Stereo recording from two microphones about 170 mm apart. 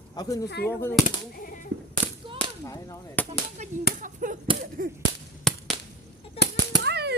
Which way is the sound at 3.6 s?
40° right (ahead or behind).